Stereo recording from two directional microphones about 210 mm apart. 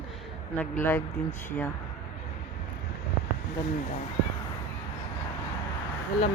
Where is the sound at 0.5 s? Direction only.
10° left (ahead or behind).